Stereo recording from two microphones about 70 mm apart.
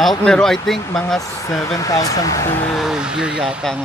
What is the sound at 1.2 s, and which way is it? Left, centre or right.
Speech, left.